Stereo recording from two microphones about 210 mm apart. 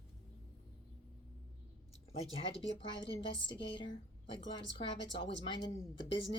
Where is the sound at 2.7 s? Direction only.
25° left (ahead or behind).